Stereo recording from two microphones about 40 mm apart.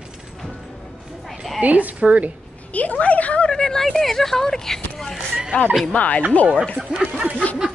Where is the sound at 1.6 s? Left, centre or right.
Right.